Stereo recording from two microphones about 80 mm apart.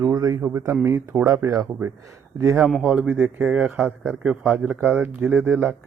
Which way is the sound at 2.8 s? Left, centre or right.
Centre.